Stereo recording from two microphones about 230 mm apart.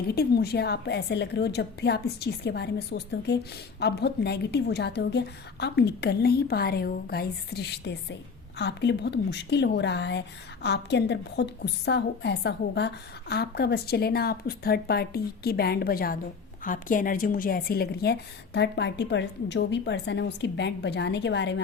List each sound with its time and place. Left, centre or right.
0.1 s a woman's voice: left